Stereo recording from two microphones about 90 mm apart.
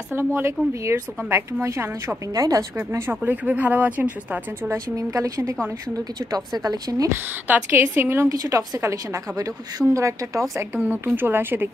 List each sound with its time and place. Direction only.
0.1 s a woman's voice: 25° right (ahead or behind)
2.3 s a woman's voice: 40° right (ahead or behind)
2.9 s speech: 25° right (ahead or behind)
4.6 s a woman's voice: 35° right (ahead or behind)
6.6 s a woman's voice: 45° right (ahead or behind)
7.1 s a woman's voice: 20° right (ahead or behind)